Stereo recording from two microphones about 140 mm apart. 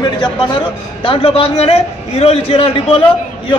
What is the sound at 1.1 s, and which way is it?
A man's voice, 45° left (ahead or behind).